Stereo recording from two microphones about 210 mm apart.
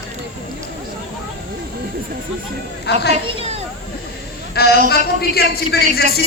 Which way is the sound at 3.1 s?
30° right (ahead or behind).